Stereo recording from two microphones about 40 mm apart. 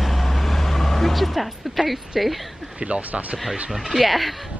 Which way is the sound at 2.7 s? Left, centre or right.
Right.